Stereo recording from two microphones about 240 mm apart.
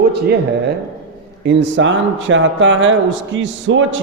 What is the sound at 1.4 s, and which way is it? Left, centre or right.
Speech, right.